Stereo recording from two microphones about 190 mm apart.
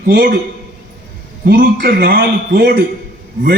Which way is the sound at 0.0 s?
55° right (ahead or behind).